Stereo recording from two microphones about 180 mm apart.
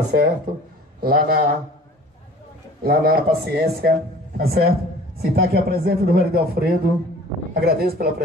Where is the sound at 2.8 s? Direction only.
55° right (ahead or behind).